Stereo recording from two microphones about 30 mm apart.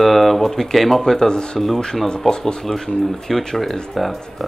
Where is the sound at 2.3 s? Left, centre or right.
Centre.